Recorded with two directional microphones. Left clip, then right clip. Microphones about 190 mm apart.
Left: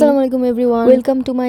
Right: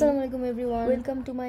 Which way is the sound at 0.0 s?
40° left (ahead or behind).